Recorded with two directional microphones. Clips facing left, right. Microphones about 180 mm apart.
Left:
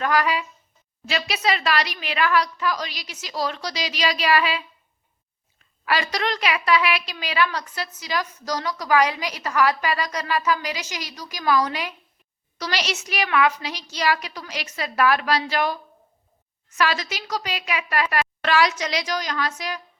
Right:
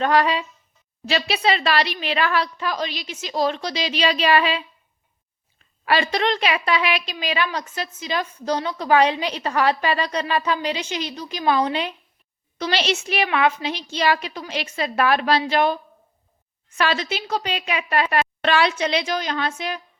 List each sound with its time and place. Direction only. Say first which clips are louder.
0.0 s a woman's voice: right 3 dB; 30° right (ahead or behind)
5.8 s a woman's voice: right 4 dB; 30° right (ahead or behind)